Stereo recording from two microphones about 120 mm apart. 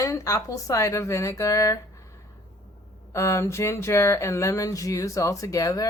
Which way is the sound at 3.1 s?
25° left (ahead or behind).